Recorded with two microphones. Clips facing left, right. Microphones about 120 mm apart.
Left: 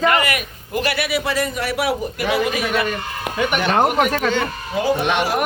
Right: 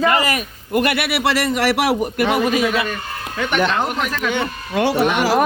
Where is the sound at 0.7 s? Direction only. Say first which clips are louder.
Right 2 dB; 55° right (ahead or behind); by 2.3 s 75° right (ahead or behind).